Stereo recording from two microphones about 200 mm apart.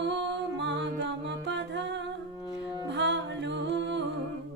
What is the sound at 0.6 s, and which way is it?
Music, 60° right (ahead or behind).